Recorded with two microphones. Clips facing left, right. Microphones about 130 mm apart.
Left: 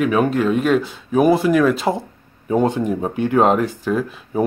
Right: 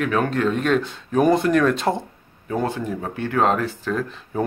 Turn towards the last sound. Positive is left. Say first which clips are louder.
# left 4 dB
turn(degrees=10)  # may be behind; listen again after turning